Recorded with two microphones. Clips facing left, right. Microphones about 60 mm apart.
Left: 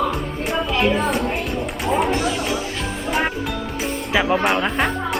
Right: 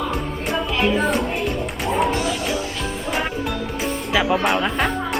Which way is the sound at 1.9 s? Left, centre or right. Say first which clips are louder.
Left 1 dB; centre.